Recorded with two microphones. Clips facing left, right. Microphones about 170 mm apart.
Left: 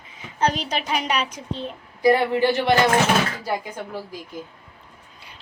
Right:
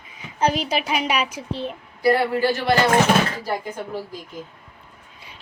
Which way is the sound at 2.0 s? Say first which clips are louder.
Left 1 dB; 15° left (ahead or behind).